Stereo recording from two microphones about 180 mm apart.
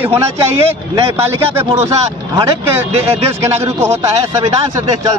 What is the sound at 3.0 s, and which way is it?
A man's voice, 15° right (ahead or behind).